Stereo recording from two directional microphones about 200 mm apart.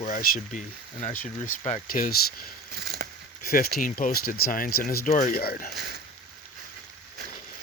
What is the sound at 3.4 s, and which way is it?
Speech, 45° left (ahead or behind).